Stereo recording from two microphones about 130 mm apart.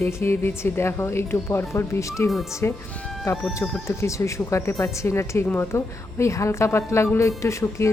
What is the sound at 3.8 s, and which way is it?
Speech, 20° left (ahead or behind).